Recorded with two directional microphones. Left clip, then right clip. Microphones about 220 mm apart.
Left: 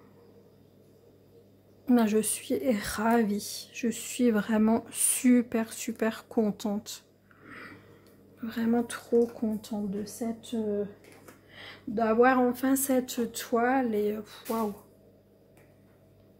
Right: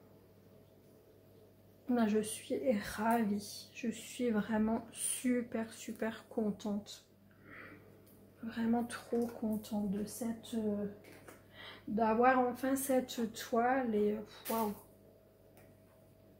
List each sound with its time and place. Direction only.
1.9 s a woman's voice: 45° left (ahead or behind)
8.5 s a woman's voice: 50° left (ahead or behind)
11.9 s a woman's voice: 45° left (ahead or behind)